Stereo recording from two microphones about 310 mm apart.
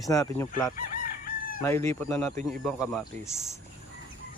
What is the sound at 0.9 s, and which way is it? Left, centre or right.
Chicken, left.